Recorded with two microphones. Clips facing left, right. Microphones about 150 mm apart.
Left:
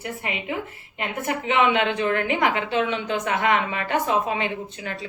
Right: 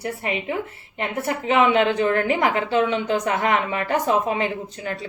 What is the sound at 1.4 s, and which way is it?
A woman's voice, 35° right (ahead or behind).